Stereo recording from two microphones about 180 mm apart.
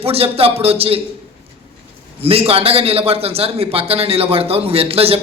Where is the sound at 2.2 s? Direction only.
30° right (ahead or behind).